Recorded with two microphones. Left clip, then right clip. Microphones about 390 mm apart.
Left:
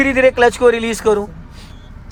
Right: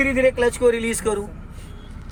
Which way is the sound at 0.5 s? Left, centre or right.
Centre.